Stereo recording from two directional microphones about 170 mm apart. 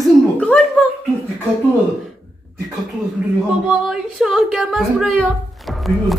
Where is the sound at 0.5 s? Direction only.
10° left (ahead or behind).